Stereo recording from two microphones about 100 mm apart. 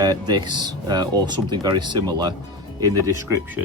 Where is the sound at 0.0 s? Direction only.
45° right (ahead or behind).